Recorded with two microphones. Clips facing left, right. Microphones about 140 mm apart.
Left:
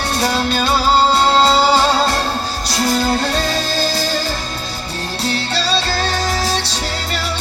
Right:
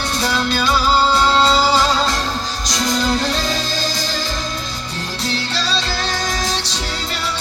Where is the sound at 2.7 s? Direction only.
30° left (ahead or behind).